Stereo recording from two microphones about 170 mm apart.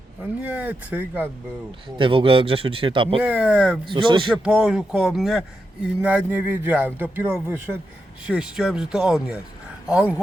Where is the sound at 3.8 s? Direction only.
30° right (ahead or behind).